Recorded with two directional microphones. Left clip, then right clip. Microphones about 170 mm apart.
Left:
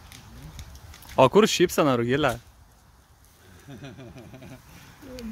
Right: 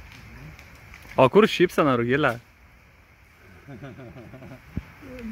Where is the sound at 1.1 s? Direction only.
25° left (ahead or behind).